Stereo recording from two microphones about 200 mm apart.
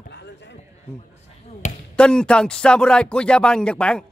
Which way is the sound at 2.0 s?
5° left (ahead or behind).